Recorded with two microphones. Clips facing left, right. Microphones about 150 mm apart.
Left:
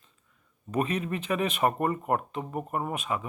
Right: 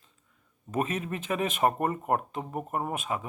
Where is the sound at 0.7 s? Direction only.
45° right (ahead or behind).